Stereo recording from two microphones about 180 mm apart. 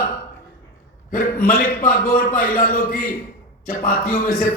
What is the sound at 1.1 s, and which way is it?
A man's voice, 55° left (ahead or behind).